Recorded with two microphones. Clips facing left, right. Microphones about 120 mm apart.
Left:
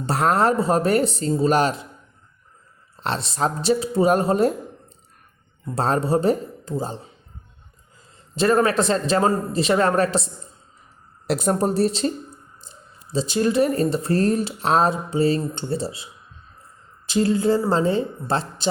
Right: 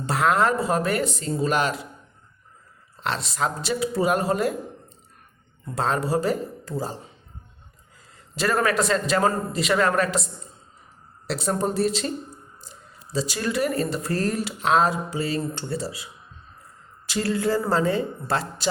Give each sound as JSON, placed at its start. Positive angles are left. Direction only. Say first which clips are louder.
{"t": 0.0, "sound": "speech", "louder": "left 2 dB", "side_deg": 35}
{"t": 3.0, "sound": "speech", "louder": "left 3 dB", "side_deg": 30}
{"t": 5.7, "sound": "speech", "louder": "left 3 dB", "side_deg": 35}
{"t": 8.4, "sound": "speech", "louder": "left 4 dB", "side_deg": 25}
{"t": 11.3, "sound": "speech", "louder": "left 4 dB", "side_deg": 50}
{"t": 11.7, "sound": "speech", "louder": "left 3 dB", "side_deg": 30}
{"t": 13.1, "sound": "speech", "louder": "left 6 dB", "side_deg": 25}
{"t": 17.1, "sound": "speech", "louder": "left 5 dB", "side_deg": 25}